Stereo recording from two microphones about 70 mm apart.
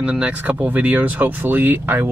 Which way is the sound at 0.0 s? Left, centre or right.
Centre.